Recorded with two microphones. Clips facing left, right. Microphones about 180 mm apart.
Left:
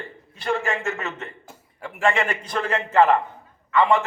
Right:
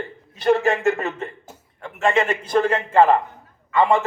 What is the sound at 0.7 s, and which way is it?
Speech, 60° right (ahead or behind).